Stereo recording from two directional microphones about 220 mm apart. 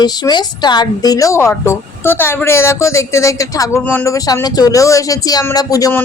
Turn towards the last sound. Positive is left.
turn(degrees=15)  # may be behind; listen again after turning